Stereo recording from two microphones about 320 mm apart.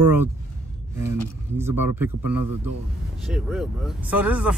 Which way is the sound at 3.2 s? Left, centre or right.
Centre.